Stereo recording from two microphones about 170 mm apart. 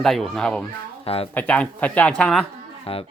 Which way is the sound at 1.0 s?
35° left (ahead or behind).